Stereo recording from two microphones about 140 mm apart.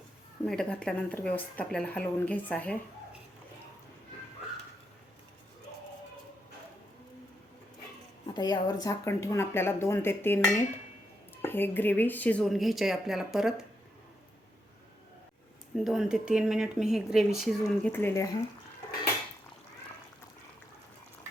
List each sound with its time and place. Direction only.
0.4 s speech: 5° left (ahead or behind)
8.3 s speech: 30° left (ahead or behind); by 13.7 s 5° right (ahead or behind)
15.7 s speech: centre (ahead or behind); by 18.3 s 20° left (ahead or behind)